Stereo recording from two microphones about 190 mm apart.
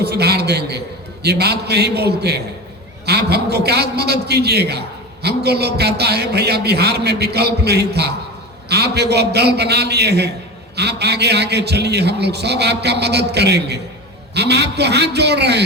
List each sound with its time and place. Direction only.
0.0 s a man's voice: 60° right (ahead or behind)